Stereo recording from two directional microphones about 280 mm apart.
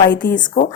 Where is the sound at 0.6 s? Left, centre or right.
Left.